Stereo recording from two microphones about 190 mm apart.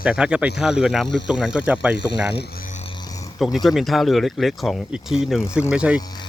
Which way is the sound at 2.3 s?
50° left (ahead or behind).